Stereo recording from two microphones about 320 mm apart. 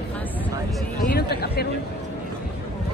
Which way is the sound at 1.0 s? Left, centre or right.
Left.